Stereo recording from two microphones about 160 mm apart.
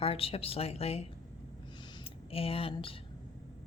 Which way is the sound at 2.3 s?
35° left (ahead or behind).